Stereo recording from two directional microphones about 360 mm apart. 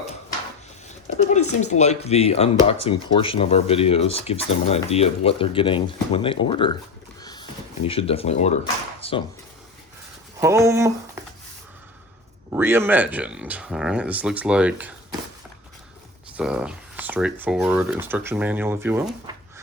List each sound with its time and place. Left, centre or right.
0.9 s speech: centre
7.2 s a sound: centre
7.9 s speech: centre
9.0 s a sound: centre
10.4 s speech: centre
12.5 s speech: centre
16.4 s speech: centre